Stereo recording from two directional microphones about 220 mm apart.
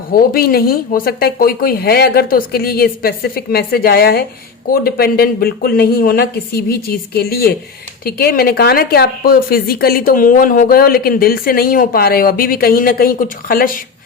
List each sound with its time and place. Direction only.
0.1 s a woman's voice: 40° left (ahead or behind)